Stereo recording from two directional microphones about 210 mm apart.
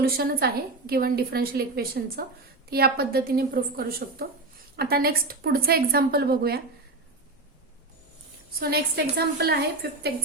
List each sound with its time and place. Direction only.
0.0 s a woman's voice: 45° right (ahead or behind)
8.5 s a woman's voice: 50° right (ahead or behind)